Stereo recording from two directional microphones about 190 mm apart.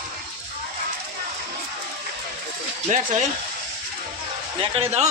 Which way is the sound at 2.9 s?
40° right (ahead or behind).